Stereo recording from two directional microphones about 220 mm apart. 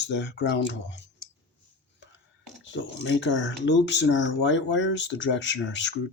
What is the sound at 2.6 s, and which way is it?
Speech, 55° left (ahead or behind).